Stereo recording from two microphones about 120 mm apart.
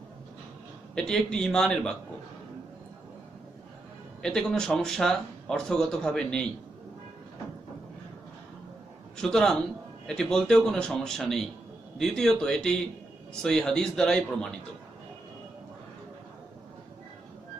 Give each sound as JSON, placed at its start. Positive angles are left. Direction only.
{"t": 0.9, "sound": "speech", "side_deg": 5}
{"t": 4.2, "sound": "speech", "side_deg": 5}
{"t": 9.1, "sound": "a man's voice", "side_deg": 5}